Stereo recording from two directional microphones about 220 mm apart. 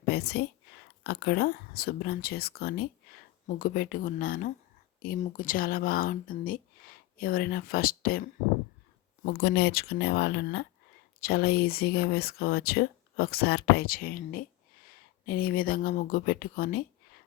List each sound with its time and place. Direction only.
0.1 s a woman's voice: 45° left (ahead or behind)